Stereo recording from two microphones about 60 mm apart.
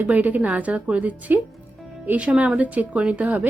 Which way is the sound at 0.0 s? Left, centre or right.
Right.